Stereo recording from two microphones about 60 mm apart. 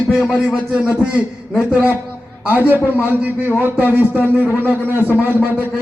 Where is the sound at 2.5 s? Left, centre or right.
Right.